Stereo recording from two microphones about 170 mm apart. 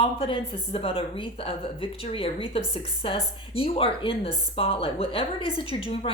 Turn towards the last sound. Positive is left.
turn(degrees=35)  # may be behind; listen again after turning